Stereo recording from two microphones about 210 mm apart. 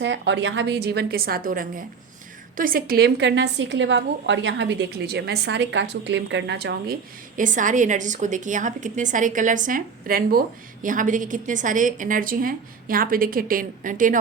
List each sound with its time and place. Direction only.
0.0 s a woman's voice: 60° right (ahead or behind)
7.3 s a woman's voice: 40° right (ahead or behind)